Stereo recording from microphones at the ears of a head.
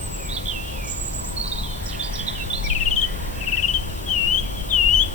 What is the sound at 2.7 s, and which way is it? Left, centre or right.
Insect, left.